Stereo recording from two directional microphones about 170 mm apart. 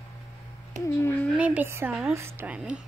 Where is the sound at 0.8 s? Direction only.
15° left (ahead or behind).